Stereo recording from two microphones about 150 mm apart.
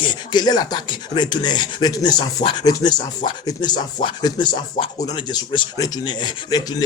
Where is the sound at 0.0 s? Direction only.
30° left (ahead or behind).